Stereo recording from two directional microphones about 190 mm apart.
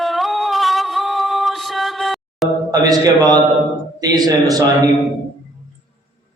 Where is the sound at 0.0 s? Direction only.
Centre (ahead or behind).